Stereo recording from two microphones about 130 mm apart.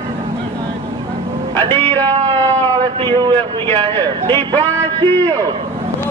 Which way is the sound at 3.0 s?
35° right (ahead or behind).